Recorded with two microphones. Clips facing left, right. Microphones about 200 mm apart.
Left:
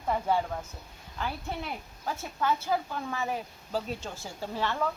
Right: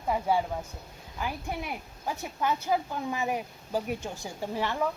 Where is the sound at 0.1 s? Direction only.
10° right (ahead or behind).